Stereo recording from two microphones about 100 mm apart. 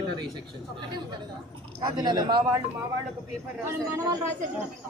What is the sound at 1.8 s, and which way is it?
Speech, 40° right (ahead or behind).